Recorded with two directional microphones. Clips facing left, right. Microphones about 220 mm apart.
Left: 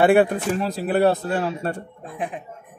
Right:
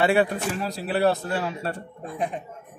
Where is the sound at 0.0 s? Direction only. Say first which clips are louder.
Left 5 dB; 50° left (ahead or behind).